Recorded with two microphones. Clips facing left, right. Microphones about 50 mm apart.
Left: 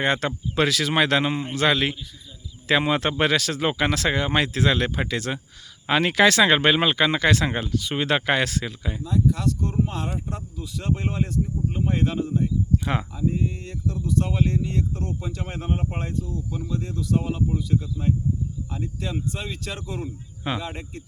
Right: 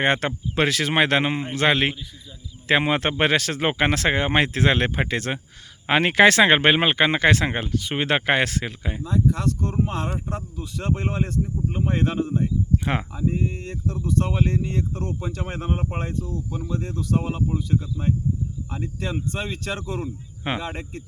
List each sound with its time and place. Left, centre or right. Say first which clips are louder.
0.0 s speech: right 2 dB; right
12.7 s speech: right 1 dB; right